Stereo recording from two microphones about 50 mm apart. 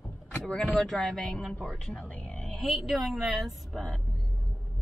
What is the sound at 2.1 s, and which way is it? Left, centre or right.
Speech, left.